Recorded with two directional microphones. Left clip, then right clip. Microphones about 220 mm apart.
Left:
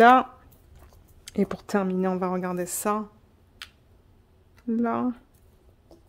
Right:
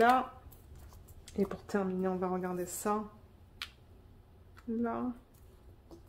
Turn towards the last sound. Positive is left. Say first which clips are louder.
# left 9 dB
turn(degrees=55)  # may be behind; listen again after turning